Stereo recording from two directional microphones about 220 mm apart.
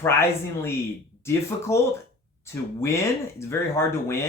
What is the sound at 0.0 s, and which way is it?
Speech, 10° left (ahead or behind).